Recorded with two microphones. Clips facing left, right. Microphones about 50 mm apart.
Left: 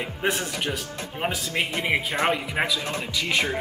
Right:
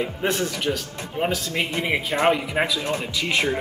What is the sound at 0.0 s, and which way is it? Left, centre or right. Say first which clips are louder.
Speech: right 3 dB; centre.